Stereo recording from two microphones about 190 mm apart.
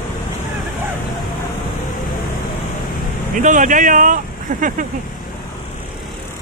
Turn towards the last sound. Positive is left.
turn(degrees=-45)  # may be behind; listen again after turning